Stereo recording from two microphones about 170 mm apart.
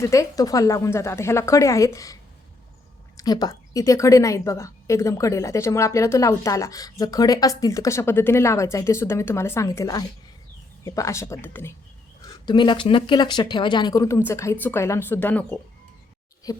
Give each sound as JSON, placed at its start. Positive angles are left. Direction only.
{"t": 0.0, "sound": "speech", "side_deg": 20}
{"t": 3.2, "sound": "a woman's voice", "side_deg": 25}
{"t": 12.2, "sound": "a woman's voice", "side_deg": 25}
{"t": 16.5, "sound": "speech", "side_deg": 20}